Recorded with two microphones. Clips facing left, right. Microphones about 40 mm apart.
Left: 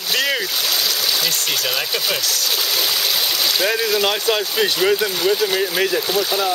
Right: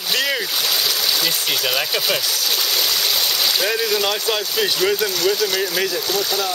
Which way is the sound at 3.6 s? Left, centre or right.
Centre.